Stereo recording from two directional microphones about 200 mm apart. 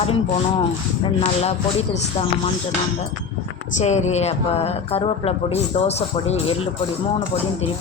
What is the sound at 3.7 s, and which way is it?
Speech, 35° left (ahead or behind).